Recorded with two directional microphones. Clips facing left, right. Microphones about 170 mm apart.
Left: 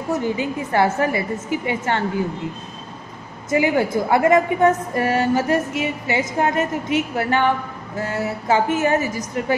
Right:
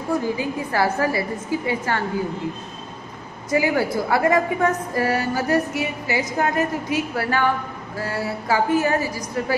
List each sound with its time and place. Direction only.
0.1 s a woman's voice: 25° left (ahead or behind)
3.4 s a woman's voice: 25° left (ahead or behind)